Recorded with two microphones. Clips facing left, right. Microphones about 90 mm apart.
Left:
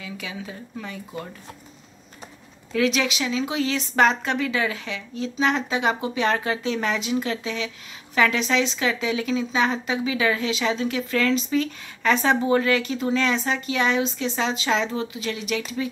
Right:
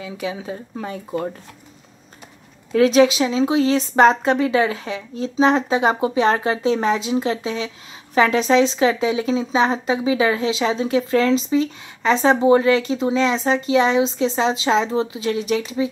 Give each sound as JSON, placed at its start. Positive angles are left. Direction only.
{"t": 0.0, "sound": "speech", "side_deg": -30}
{"t": 2.7, "sound": "speech", "side_deg": -35}